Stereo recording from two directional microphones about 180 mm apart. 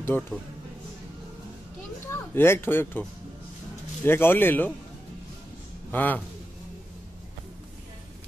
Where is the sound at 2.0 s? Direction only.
15° left (ahead or behind).